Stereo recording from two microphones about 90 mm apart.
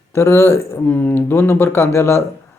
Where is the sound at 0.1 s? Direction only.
30° left (ahead or behind).